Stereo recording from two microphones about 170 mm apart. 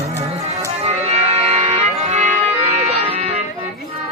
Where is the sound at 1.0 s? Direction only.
40° right (ahead or behind).